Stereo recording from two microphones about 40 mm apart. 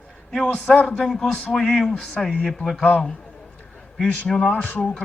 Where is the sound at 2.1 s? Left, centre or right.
Left.